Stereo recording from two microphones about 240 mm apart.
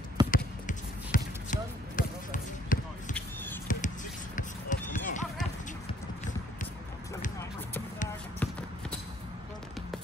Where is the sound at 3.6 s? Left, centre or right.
Left.